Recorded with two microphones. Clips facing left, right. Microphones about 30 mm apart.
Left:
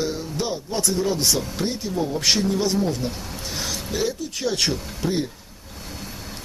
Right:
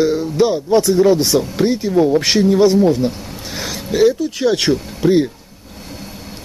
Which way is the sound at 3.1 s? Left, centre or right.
Centre.